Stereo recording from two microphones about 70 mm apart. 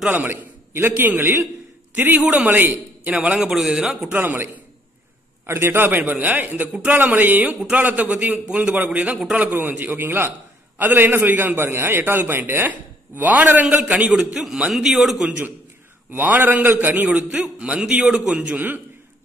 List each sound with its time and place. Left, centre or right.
0.1 s a man's voice: right
3.3 s a man's voice: centre
4.1 s a man's voice: right
5.5 s a man's voice: right
9.1 s a man's voice: centre
9.4 s a man's voice: right
16.1 s a man's voice: right